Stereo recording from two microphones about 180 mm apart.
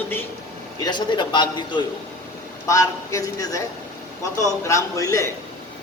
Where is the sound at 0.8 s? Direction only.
25° left (ahead or behind).